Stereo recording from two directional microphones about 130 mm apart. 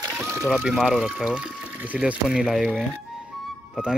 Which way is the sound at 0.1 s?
20° right (ahead or behind).